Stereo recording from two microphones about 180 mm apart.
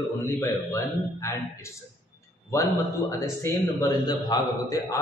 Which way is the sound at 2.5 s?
15° left (ahead or behind).